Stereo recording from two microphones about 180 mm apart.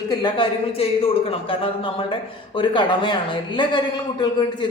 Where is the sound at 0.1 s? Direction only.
25° left (ahead or behind).